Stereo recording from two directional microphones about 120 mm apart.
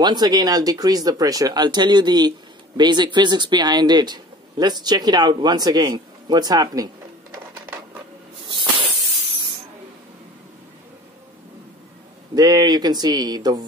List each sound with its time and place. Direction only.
0.0 s speech: 35° right (ahead or behind)
12.4 s speech: 35° right (ahead or behind)